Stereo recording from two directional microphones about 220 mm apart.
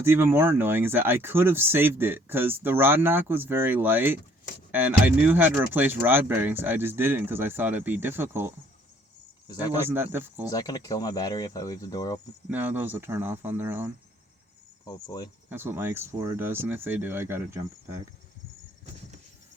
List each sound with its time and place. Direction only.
0.0 s speech: 10° right (ahead or behind)
9.7 s speech: 10° right (ahead or behind)
10.5 s speech: 15° left (ahead or behind)
12.5 s speech: 10° right (ahead or behind)
14.8 s speech: 15° left (ahead or behind)
15.4 s speech: 10° right (ahead or behind)